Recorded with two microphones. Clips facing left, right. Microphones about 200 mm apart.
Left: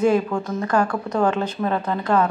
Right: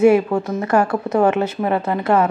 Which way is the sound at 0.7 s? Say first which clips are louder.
Right 4 dB; 25° right (ahead or behind).